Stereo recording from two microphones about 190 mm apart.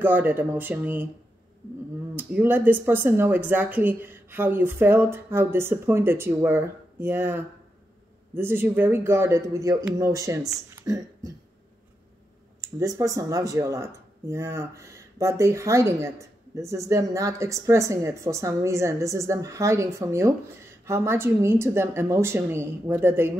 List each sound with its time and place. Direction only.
0.0 s speech: 10° right (ahead or behind)
2.1 s speech: 10° right (ahead or behind)
12.5 s speech: 15° right (ahead or behind)